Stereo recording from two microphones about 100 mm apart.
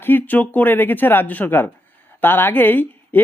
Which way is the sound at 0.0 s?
20° left (ahead or behind).